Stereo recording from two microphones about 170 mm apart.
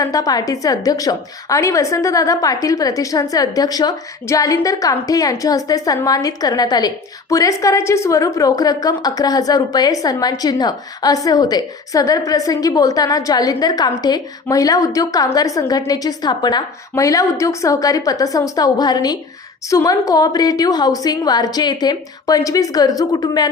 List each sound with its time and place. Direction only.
0.0 s a woman's voice: 20° left (ahead or behind)